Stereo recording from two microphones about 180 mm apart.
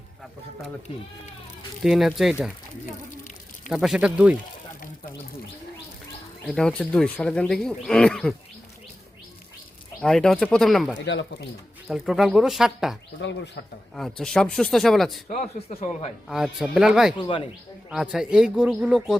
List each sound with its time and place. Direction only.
1.8 s speech: centre (ahead or behind)
3.7 s speech: 5° right (ahead or behind)
6.5 s speech: 5° left (ahead or behind)
10.0 s speech: centre (ahead or behind)
10.9 s speech: 90° left
11.9 s speech: centre (ahead or behind)
15.3 s speech: 40° left (ahead or behind)
16.3 s speech: 5° right (ahead or behind)